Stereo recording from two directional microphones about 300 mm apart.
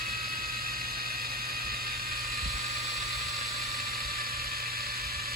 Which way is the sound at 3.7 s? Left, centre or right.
Right.